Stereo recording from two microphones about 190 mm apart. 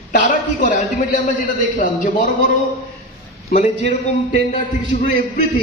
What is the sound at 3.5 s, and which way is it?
A man's voice, 40° left (ahead or behind).